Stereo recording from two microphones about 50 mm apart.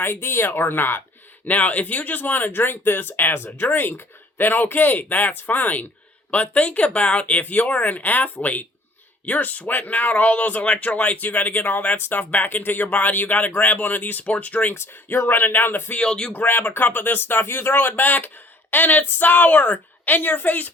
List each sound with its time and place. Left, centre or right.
0.0 s speech: left
1.5 s speech: left
11.9 s speech: left
12.3 s speech: left
15.3 s speech: left
15.9 s speech: centre
16.3 s speech: left